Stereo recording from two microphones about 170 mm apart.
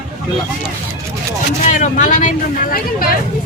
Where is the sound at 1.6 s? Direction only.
45° left (ahead or behind).